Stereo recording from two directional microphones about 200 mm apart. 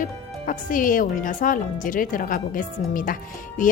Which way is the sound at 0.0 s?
40° left (ahead or behind).